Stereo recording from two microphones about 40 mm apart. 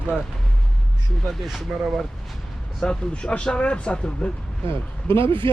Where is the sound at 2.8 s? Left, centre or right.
Left.